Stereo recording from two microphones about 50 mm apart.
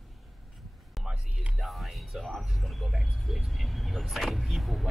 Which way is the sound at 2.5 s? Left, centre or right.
Centre.